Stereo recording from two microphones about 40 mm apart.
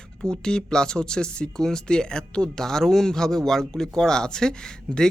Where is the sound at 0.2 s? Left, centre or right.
Centre.